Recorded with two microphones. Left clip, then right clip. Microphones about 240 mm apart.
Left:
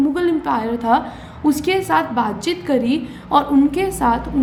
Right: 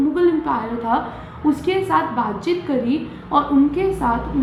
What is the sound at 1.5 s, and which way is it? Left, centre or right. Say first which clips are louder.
A woman's voice: left 2 dB; left.